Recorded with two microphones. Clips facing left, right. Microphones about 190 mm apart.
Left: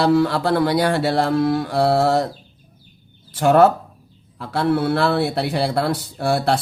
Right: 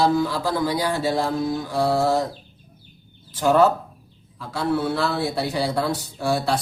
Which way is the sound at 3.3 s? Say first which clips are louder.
Left 3 dB; 65° left (ahead or behind).